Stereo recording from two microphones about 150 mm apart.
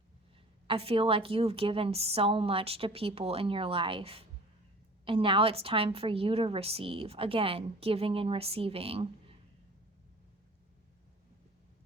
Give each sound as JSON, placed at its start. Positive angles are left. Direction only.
{"t": 0.7, "sound": "a woman's voice", "side_deg": -40}